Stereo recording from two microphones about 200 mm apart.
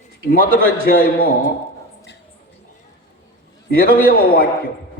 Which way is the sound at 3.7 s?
45° left (ahead or behind).